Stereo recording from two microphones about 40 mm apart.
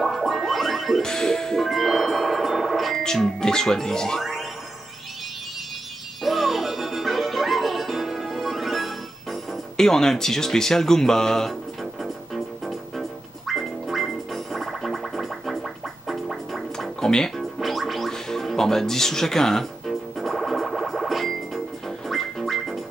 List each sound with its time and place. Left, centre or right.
0.0 s a sound: centre
0.5 s music: centre
1.0 s music: centre
3.3 s speech: centre
4.2 s music: centre
6.2 s music: centre
9.8 s speech: centre
13.5 s music: centre
17.0 s music: centre
17.4 s gargling: centre
18.1 s speech: centre
19.9 s music: centre